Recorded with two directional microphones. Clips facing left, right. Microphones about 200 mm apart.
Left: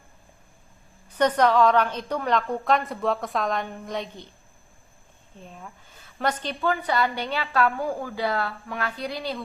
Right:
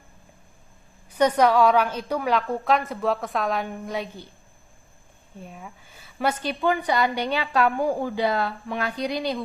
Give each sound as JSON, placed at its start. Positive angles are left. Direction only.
{"t": 1.1, "sound": "a woman's voice", "side_deg": -10}
{"t": 5.4, "sound": "a woman's voice", "side_deg": -10}